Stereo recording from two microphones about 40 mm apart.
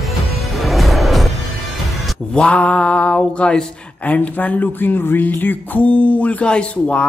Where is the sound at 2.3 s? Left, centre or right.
Left.